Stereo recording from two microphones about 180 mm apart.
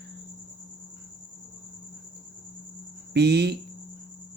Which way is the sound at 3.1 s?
70° right (ahead or behind).